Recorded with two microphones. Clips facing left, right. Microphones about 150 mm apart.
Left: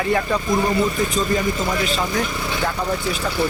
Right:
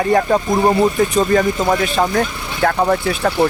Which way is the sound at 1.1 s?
60° right (ahead or behind).